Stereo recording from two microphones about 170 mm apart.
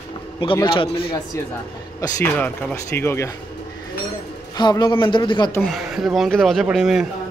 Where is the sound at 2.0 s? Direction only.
10° left (ahead or behind).